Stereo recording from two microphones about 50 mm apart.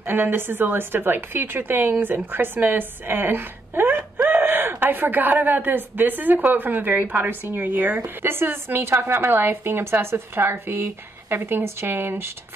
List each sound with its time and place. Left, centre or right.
0.0 s a woman's voice: right